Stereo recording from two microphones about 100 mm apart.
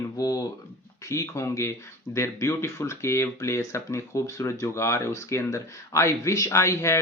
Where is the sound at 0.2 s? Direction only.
40° left (ahead or behind).